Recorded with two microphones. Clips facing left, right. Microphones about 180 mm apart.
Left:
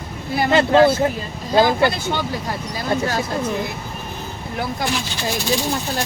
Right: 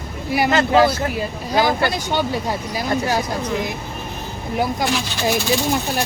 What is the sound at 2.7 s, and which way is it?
Speech, 15° right (ahead or behind).